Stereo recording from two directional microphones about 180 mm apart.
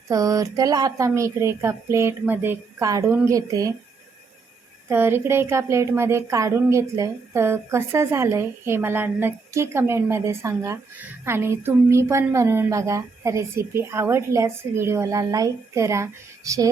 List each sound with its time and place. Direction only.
0.1 s a woman's voice: 20° right (ahead or behind)
4.9 s a woman's voice: 15° right (ahead or behind)